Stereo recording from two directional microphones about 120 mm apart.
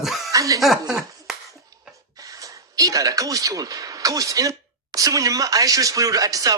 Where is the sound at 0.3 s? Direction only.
30° right (ahead or behind).